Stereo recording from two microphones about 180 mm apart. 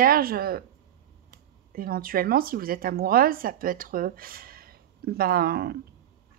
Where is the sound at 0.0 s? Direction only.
55° right (ahead or behind).